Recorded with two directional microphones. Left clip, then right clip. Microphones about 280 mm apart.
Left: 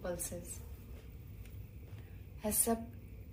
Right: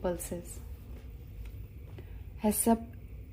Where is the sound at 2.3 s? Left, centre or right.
Right.